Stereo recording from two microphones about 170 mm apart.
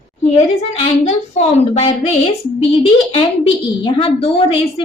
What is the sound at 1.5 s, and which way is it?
Speech, 40° left (ahead or behind).